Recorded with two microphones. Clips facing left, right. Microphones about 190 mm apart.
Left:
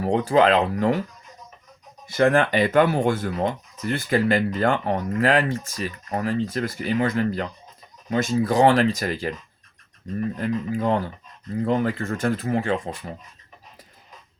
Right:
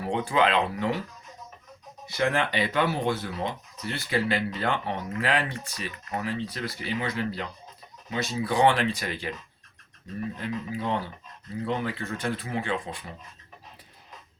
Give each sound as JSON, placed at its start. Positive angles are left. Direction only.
{"t": 0.0, "sound": "speech", "side_deg": 40}
{"t": 2.0, "sound": "speech", "side_deg": 50}
{"t": 10.3, "sound": "speech", "side_deg": 45}